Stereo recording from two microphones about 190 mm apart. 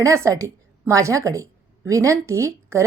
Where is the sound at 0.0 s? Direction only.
15° right (ahead or behind).